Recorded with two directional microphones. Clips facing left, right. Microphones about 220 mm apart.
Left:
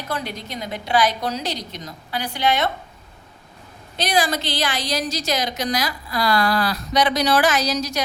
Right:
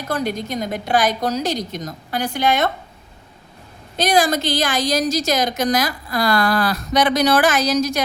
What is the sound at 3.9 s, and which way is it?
A woman's voice, 45° right (ahead or behind).